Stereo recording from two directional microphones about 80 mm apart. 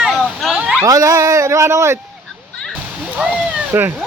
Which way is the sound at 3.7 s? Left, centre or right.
Right.